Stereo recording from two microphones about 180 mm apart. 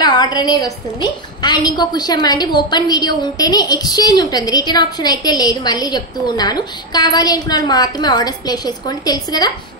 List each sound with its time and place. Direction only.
0.0 s a woman's voice: 25° left (ahead or behind)